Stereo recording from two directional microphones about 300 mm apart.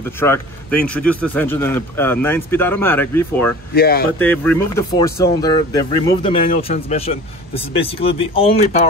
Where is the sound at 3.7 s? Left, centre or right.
Left.